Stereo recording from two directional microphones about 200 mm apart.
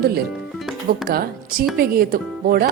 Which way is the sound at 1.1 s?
50° right (ahead or behind).